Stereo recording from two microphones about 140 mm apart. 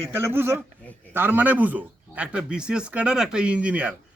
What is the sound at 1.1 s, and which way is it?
Speech, 15° right (ahead or behind).